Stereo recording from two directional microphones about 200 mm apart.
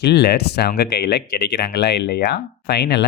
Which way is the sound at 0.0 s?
55° left (ahead or behind).